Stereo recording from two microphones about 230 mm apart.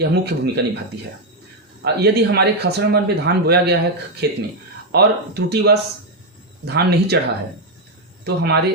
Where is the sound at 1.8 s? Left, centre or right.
Right.